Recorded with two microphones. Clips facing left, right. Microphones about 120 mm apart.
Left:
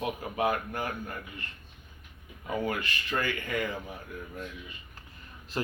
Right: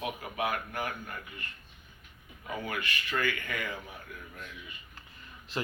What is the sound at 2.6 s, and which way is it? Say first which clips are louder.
Speech: left 4 dB; 30° left (ahead or behind).